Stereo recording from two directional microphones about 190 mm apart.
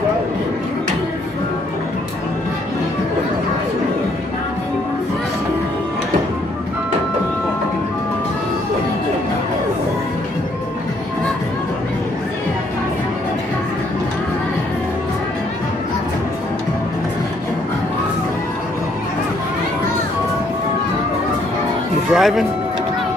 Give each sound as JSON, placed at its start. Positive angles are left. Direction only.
{"t": 22.1, "sound": "music", "side_deg": 0}